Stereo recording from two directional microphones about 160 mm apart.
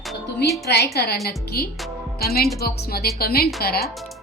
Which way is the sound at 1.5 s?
75° left (ahead or behind).